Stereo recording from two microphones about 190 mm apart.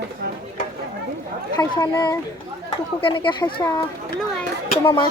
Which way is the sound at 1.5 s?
20° left (ahead or behind).